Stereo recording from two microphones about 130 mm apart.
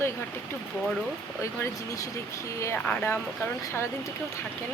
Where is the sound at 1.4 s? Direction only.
20° left (ahead or behind).